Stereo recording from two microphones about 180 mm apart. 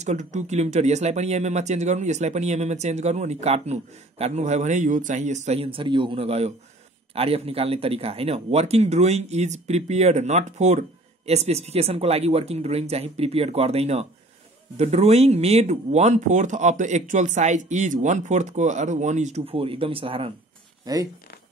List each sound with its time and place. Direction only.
0.0 s speech: 40° right (ahead or behind)
20.8 s speech: 20° right (ahead or behind)